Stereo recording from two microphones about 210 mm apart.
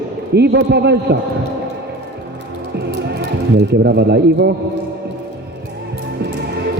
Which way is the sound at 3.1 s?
55° right (ahead or behind).